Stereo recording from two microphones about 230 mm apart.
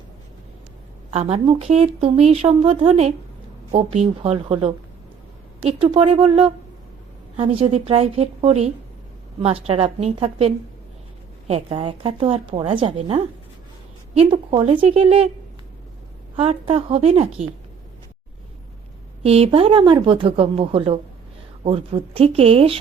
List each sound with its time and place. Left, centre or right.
1.1 s a woman's voice: right
16.3 s a woman's voice: right
19.2 s a woman's voice: right